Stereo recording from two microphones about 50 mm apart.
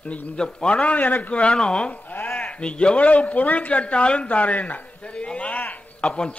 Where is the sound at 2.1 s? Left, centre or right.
Left.